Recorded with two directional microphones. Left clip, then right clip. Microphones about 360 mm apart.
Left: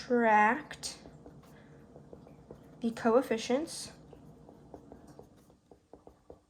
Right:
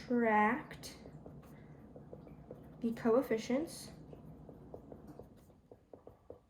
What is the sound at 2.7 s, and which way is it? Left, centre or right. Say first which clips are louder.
A woman's voice: left 4 dB; left.